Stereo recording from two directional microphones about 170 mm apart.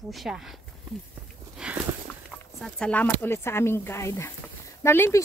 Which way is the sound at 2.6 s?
5° left (ahead or behind).